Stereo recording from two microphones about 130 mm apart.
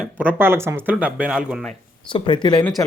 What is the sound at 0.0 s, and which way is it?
Speech, 15° right (ahead or behind).